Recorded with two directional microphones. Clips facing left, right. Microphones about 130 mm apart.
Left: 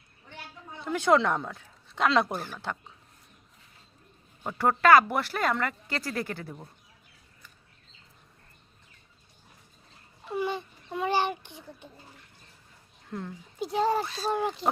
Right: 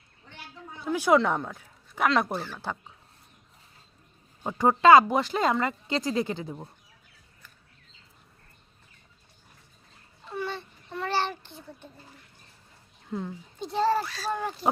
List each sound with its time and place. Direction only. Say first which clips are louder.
0.9 s speech: right 1 dB; 5° right (ahead or behind)
4.4 s speech: right 3 dB; 15° right (ahead or behind)
10.2 s a sound: left 3 dB; 15° left (ahead or behind)
13.1 s speech: right 3 dB; 10° right (ahead or behind)
13.6 s a child's voice: right 1 dB; 10° left (ahead or behind)